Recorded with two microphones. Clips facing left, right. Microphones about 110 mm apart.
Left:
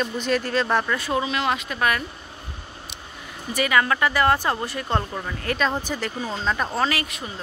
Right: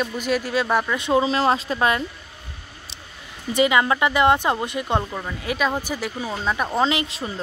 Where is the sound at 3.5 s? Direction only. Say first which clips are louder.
Right 3 dB; 20° right (ahead or behind).